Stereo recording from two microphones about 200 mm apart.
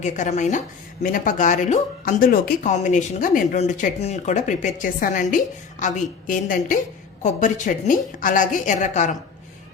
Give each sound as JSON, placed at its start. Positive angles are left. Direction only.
{"t": 0.0, "sound": "speech", "side_deg": 35}